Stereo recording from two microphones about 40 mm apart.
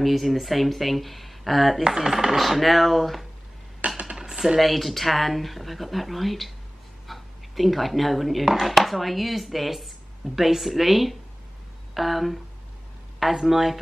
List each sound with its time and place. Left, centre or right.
0.0 s speech: centre
1.9 s speech: centre
3.8 s chopping: right
4.6 s speech: centre